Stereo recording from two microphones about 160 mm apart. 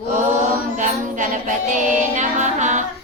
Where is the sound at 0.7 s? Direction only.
50° right (ahead or behind).